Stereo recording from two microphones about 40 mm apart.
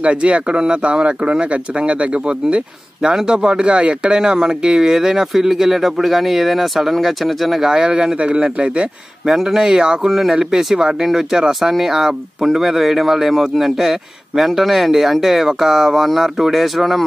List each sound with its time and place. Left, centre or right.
0.0 s speech: right; by 7.7 s centre
7.7 s speech: centre
9.2 s speech: centre